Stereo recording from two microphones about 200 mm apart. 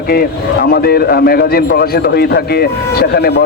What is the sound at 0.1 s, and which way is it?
A man's voice, 50° left (ahead or behind).